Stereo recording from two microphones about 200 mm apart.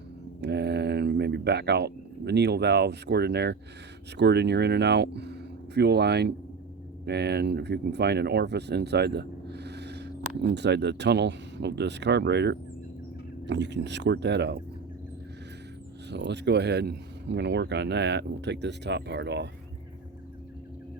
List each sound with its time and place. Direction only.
0.4 s speech: 55° right (ahead or behind)
16.0 s speech: 60° right (ahead or behind)